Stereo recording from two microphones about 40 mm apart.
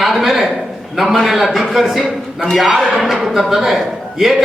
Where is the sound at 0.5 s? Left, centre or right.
Centre.